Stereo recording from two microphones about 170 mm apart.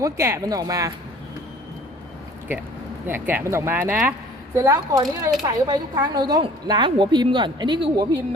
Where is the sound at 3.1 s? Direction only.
10° right (ahead or behind).